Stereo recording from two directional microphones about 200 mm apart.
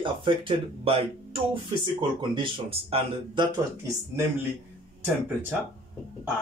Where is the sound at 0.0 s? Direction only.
25° right (ahead or behind).